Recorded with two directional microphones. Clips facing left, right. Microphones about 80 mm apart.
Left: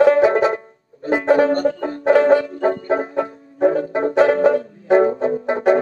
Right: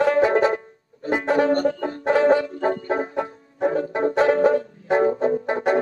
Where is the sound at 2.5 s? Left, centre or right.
Left.